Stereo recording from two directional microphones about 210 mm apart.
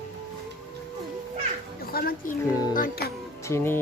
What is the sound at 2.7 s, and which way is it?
Music, 45° left (ahead or behind).